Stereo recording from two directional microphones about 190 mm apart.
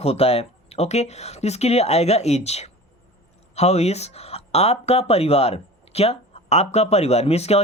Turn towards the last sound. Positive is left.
turn(degrees=35)  # may be behind; listen again after turning